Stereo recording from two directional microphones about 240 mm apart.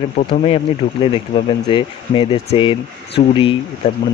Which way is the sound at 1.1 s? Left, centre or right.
Left.